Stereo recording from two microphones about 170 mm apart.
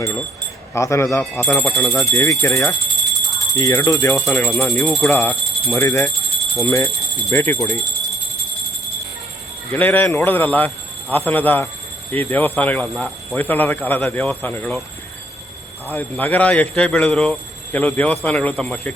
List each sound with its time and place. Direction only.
0.7 s a man's voice: 15° left (ahead or behind)
1.5 s speech: centre (ahead or behind)
2.0 s a man's voice: 20° left (ahead or behind)
3.1 s alarm: centre (ahead or behind)
3.5 s speech: 20° left (ahead or behind)
4.3 s speech: centre (ahead or behind)
5.0 s a man's voice: 15° left (ahead or behind)
9.7 s a man's voice: 10° left (ahead or behind)
15.9 s a man's voice: 10° left (ahead or behind)